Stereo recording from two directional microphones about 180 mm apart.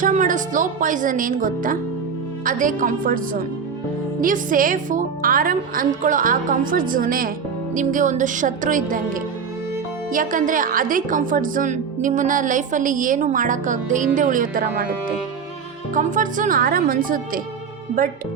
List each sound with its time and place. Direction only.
0.0 s a woman's voice: 45° right (ahead or behind)
16.0 s a woman's voice: 45° right (ahead or behind)